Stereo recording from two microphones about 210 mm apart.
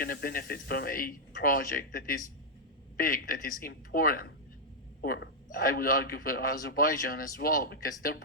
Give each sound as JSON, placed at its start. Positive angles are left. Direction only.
{"t": 0.0, "sound": "a man's voice", "side_deg": 45}